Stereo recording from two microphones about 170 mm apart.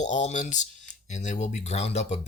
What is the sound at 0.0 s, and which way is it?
Speech, 45° left (ahead or behind).